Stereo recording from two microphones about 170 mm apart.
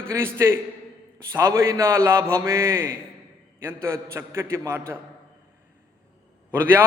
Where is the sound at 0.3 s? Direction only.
15° right (ahead or behind).